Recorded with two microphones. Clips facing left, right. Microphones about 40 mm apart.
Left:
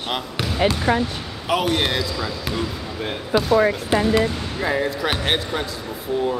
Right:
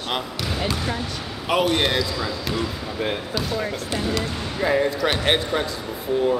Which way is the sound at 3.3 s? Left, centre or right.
Left.